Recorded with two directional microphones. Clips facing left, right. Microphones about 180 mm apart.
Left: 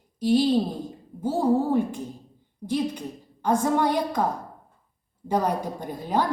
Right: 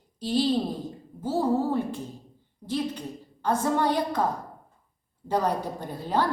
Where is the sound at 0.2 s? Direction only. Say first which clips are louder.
Left 4 dB; 10° left (ahead or behind).